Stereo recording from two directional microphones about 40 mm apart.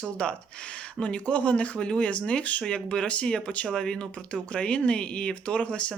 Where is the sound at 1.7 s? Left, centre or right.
Left.